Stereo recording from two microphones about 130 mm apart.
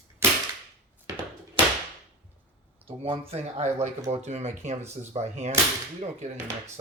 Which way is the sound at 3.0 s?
50° right (ahead or behind).